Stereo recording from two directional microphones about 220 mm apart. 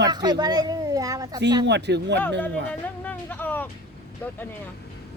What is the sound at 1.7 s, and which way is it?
Speech, 50° right (ahead or behind).